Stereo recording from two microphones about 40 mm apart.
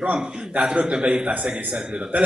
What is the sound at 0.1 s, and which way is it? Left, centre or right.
Speech, right.